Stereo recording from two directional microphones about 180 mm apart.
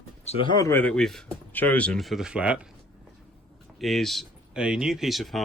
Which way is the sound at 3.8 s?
Centre (ahead or behind).